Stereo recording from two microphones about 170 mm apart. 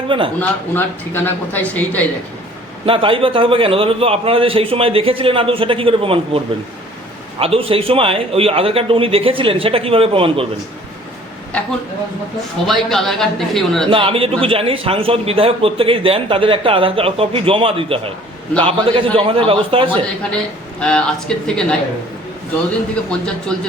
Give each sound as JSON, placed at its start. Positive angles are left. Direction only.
{"t": 0.3, "sound": "a man's voice", "side_deg": 10}
{"t": 2.8, "sound": "a man's voice", "side_deg": -30}
{"t": 12.6, "sound": "a woman's voice", "side_deg": 0}
{"t": 13.8, "sound": "a man's voice", "side_deg": -30}
{"t": 20.3, "sound": "a woman's voice", "side_deg": 5}
{"t": 23.5, "sound": "a woman's voice", "side_deg": 5}